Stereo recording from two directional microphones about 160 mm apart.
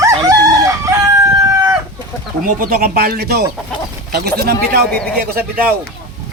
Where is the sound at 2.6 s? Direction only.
65° right (ahead or behind).